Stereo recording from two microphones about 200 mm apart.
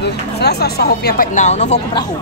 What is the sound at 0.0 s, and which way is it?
Speech, 55° left (ahead or behind).